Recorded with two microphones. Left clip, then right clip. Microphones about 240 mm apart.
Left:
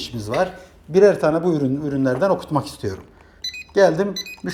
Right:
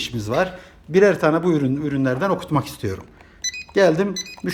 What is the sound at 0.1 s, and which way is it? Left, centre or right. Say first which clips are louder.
Speech: right 2 dB; right.